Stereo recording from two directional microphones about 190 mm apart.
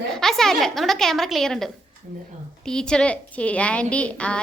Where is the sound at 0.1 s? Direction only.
Centre (ahead or behind).